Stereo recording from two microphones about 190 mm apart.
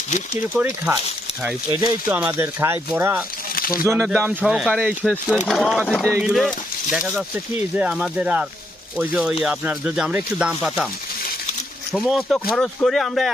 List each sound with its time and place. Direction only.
0.5 s speech: 10° right (ahead or behind)
1.8 s speech: 20° right (ahead or behind)
3.5 s a sound: 50° left (ahead or behind)
3.8 s speech: 10° right (ahead or behind)
6.1 s speech: 10° right (ahead or behind)
11.9 s speech: centre (ahead or behind)